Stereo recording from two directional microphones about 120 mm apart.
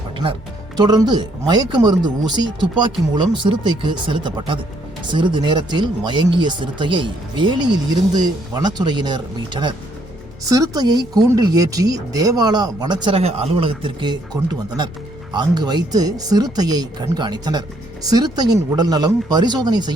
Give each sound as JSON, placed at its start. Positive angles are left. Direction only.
{"t": 0.8, "sound": "speech", "side_deg": -35}
{"t": 10.4, "sound": "speech", "side_deg": -30}
{"t": 13.1, "sound": "speech", "side_deg": -55}